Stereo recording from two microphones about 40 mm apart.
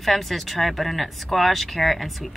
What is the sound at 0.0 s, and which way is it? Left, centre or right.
Speech, centre.